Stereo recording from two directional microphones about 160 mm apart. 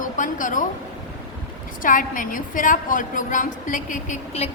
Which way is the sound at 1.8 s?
55° left (ahead or behind).